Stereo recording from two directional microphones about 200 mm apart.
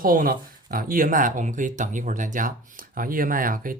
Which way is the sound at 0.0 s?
45° right (ahead or behind).